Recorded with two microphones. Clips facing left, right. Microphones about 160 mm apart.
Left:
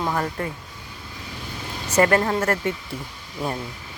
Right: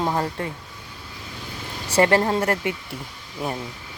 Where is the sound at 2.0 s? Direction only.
25° right (ahead or behind).